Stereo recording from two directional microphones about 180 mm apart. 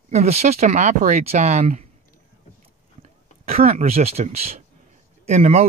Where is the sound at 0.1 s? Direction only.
35° right (ahead or behind).